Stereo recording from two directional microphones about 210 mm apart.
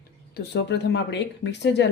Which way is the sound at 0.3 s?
55° left (ahead or behind).